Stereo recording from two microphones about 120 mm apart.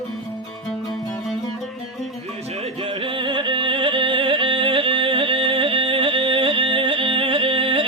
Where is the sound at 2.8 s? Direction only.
45° right (ahead or behind).